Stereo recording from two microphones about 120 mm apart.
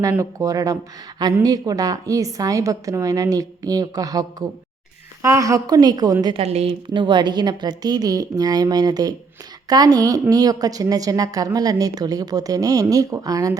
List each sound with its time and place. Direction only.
0.1 s a woman's voice: 25° right (ahead or behind)
6.4 s a woman's voice: 60° right (ahead or behind)
6.9 s a woman's voice: 40° right (ahead or behind)